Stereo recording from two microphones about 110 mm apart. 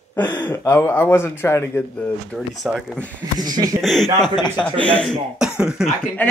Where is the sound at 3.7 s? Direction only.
5° left (ahead or behind).